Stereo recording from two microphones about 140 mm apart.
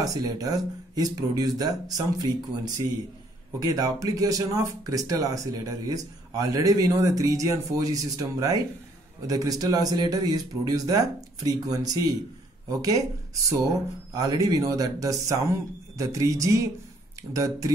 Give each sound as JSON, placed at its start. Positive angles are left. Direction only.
{"t": 0.0, "sound": "speech", "side_deg": -25}